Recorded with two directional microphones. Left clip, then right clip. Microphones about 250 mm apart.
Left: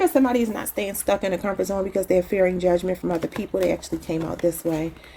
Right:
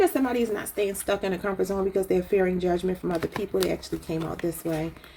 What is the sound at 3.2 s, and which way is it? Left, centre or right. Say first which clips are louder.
Speech: left 2 dB; centre.